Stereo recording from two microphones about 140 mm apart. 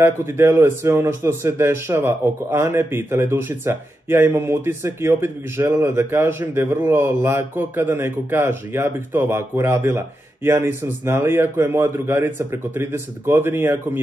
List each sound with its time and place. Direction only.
0.0 s speech: 20° right (ahead or behind)